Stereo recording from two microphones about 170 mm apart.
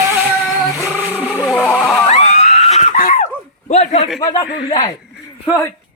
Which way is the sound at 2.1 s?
40° left (ahead or behind).